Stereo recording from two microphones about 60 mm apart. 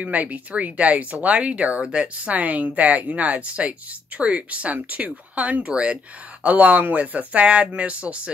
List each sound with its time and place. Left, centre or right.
0.0 s speech: right